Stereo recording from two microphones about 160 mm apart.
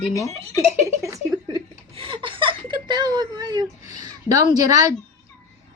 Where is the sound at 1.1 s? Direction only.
30° right (ahead or behind).